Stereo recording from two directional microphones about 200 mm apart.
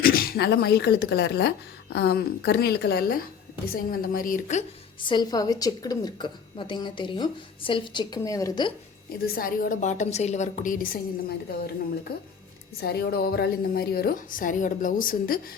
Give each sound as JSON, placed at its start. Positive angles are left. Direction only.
{"t": 0.0, "sound": "speech", "side_deg": 45}
{"t": 4.9, "sound": "a woman's voice", "side_deg": 25}
{"t": 9.2, "sound": "a woman's voice", "side_deg": 50}